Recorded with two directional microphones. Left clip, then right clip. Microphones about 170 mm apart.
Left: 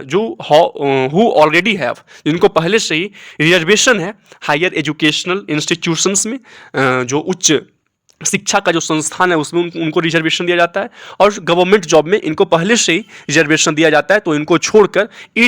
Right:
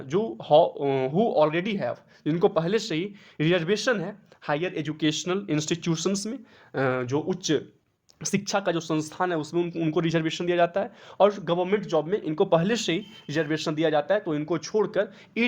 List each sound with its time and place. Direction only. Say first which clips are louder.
0.1 s speech: left 9 dB; 25° left (ahead or behind); by 4.9 s 40° left (ahead or behind)
4.9 s speech: left 12 dB; 20° left (ahead or behind)
11.5 s speech: left 14 dB; 40° left (ahead or behind); by 13.1 s 20° left (ahead or behind)
13.2 s speech: left 16 dB; 35° left (ahead or behind)
14.9 s speech: left 12 dB; 25° left (ahead or behind)